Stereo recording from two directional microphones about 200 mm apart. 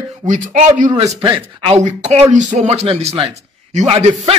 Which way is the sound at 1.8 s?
35° right (ahead or behind).